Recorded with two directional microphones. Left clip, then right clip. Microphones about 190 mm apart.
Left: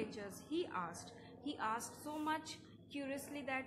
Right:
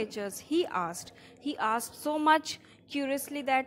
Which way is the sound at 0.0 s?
45° right (ahead or behind).